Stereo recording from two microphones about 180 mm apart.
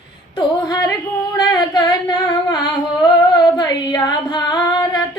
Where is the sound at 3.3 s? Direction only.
20° left (ahead or behind).